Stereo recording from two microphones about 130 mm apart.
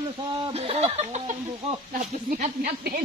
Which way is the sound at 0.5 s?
55° right (ahead or behind).